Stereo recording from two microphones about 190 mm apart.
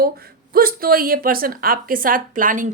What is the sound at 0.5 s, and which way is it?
A woman's voice, 50° right (ahead or behind).